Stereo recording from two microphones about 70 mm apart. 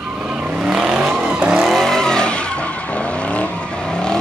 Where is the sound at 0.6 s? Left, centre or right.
Centre.